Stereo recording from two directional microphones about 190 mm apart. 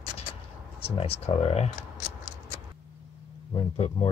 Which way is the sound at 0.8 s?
30° left (ahead or behind).